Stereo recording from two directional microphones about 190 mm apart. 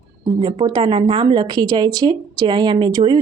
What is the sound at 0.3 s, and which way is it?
Speech, 25° right (ahead or behind).